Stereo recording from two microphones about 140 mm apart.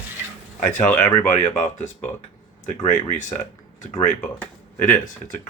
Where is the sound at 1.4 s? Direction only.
60° left (ahead or behind).